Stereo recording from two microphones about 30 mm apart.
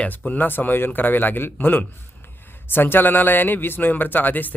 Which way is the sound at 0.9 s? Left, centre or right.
Left.